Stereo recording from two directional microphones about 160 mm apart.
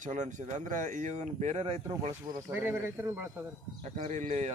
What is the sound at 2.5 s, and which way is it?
Speech, 15° right (ahead or behind).